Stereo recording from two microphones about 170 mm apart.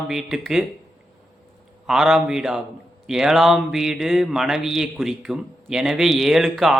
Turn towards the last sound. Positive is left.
turn(degrees=0)  # may be behind; listen again after turning